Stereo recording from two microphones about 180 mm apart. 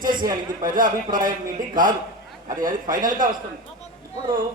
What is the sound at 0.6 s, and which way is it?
A man's voice, 50° right (ahead or behind).